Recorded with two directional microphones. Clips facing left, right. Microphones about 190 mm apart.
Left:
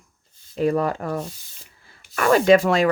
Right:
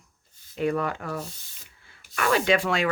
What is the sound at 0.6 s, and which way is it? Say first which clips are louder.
Speech: left 5 dB; 35° left (ahead or behind).